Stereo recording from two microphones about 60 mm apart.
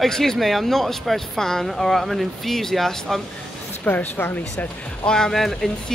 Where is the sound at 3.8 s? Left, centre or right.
Left.